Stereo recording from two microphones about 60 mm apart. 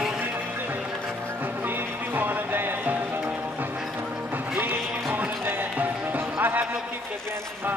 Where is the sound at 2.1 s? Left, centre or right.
Right.